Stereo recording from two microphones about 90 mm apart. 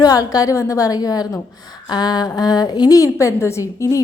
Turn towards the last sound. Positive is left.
turn(degrees=35)  # may be behind; listen again after turning